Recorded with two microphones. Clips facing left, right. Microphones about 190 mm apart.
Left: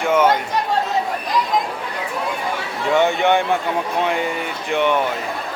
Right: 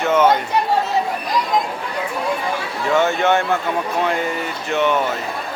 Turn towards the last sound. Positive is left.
turn(degrees=15)  # may be behind; listen again after turning